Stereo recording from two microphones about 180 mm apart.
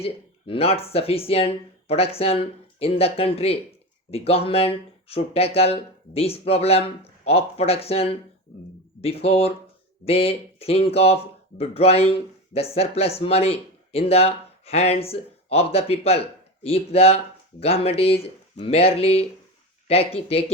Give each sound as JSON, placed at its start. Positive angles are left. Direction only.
{"t": 0.0, "sound": "speech", "side_deg": 30}